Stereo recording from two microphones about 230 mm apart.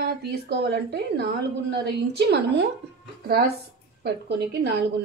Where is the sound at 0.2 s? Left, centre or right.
Right.